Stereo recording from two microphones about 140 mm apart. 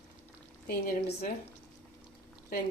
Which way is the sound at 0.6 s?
75° left (ahead or behind).